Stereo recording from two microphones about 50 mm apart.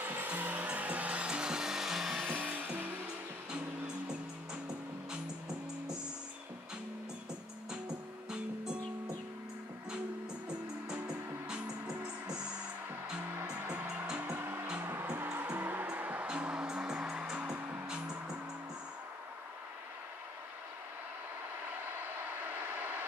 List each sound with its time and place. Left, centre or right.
0.0 s music: right; by 2.2 s centre
2.3 s vehicle: right
3.5 s music: centre
11.4 s music: centre
13.5 s music: right
14.3 s music: right
17.6 s music: right
17.8 s music: centre
22.0 s vehicle: right